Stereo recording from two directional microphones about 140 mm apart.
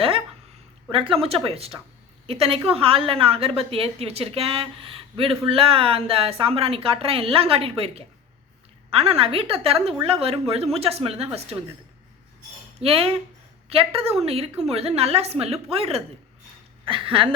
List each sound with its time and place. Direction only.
0.9 s a woman's voice: 40° right (ahead or behind)
12.8 s a woman's voice: 45° right (ahead or behind)